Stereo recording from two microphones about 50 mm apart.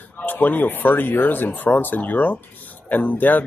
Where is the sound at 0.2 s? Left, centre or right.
Left.